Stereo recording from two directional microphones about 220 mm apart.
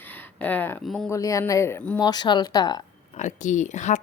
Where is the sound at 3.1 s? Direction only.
35° left (ahead or behind).